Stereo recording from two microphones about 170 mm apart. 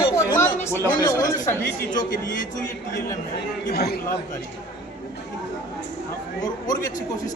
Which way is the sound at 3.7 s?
65° left (ahead or behind).